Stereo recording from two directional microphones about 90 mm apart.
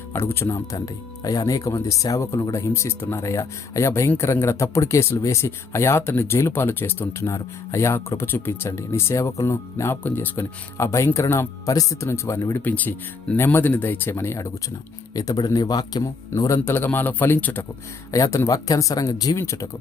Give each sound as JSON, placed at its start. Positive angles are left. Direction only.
{"t": 0.1, "sound": "speech", "side_deg": 25}
{"t": 1.2, "sound": "speech", "side_deg": 45}
{"t": 12.6, "sound": "speech", "side_deg": 20}
{"t": 15.1, "sound": "a man's voice", "side_deg": 40}
{"t": 16.3, "sound": "speech", "side_deg": 30}
{"t": 16.6, "sound": "speech", "side_deg": 20}
{"t": 18.1, "sound": "speech", "side_deg": 35}